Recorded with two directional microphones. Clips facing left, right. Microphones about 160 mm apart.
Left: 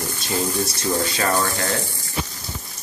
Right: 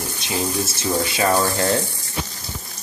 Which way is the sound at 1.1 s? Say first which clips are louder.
Right 3 dB; 15° right (ahead or behind).